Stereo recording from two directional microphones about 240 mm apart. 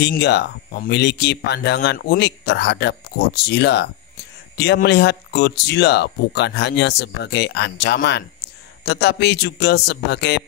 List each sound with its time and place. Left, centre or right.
0.0 s speech: left